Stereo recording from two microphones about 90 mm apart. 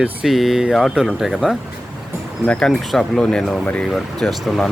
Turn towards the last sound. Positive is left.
turn(degrees=5)  # may be behind; listen again after turning